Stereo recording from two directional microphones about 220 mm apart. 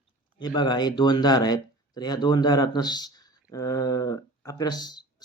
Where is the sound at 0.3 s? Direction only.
20° left (ahead or behind).